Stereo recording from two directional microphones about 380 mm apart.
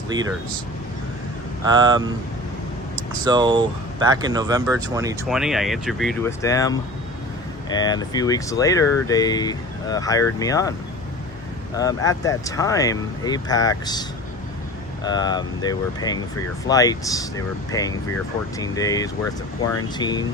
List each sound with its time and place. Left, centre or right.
1.6 s speech: centre
15.0 s speech: centre